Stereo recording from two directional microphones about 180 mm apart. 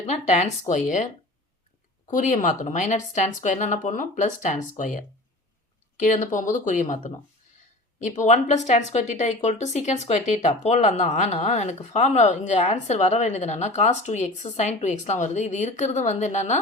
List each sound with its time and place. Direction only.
0.0 s speech: 40° left (ahead or behind)
2.0 s speech: 45° left (ahead or behind)